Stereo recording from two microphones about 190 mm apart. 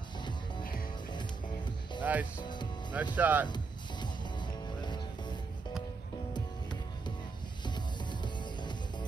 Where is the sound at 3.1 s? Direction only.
10° right (ahead or behind).